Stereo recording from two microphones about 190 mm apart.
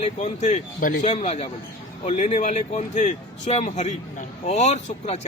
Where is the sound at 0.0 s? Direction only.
40° left (ahead or behind).